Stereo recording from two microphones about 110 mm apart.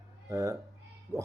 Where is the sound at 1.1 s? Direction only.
20° left (ahead or behind).